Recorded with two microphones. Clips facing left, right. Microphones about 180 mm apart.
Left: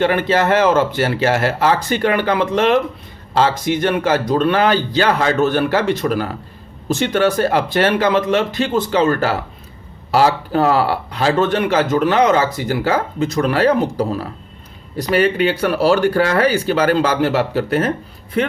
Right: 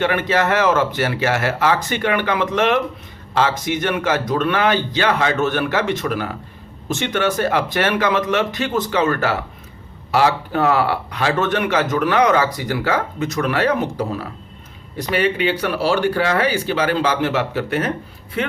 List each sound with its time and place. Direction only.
0.0 s speech: 30° left (ahead or behind)